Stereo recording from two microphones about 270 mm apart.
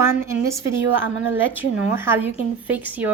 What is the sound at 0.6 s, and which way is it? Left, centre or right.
Speech, right.